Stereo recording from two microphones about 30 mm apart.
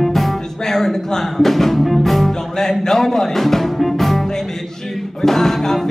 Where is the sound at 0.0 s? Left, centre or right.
Centre.